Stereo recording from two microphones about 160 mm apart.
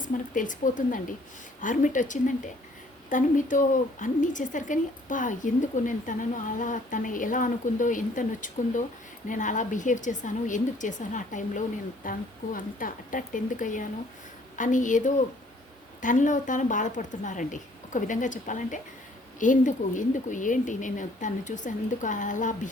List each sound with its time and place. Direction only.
0.0 s a woman's voice: 55° left (ahead or behind)